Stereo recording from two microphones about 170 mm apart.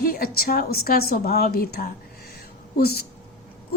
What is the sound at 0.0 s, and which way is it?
A woman's voice, 60° left (ahead or behind).